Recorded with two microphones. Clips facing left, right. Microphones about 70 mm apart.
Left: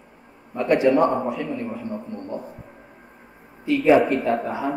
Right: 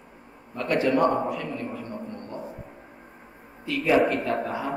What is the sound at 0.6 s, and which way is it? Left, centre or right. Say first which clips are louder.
A man's voice: left 5 dB; centre.